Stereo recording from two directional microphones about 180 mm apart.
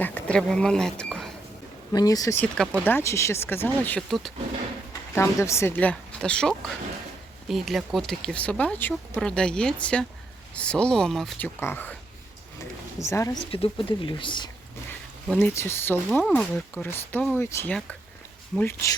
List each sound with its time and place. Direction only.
0.0 s a sound: 10° left (ahead or behind)
1.9 s speech: 20° left (ahead or behind); by 4.3 s 5° left (ahead or behind)
5.1 s speech: 15° left (ahead or behind)
13.0 s speech: 15° left (ahead or behind)
13.5 s speech: 30° left (ahead or behind)
15.3 s speech: 5° left (ahead or behind)